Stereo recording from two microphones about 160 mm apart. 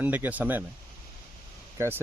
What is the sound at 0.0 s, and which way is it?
Speech, 10° right (ahead or behind).